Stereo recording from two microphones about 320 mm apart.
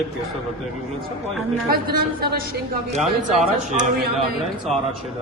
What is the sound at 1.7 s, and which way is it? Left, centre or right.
Speech, right.